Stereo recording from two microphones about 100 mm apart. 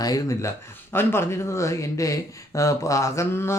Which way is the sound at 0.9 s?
25° left (ahead or behind).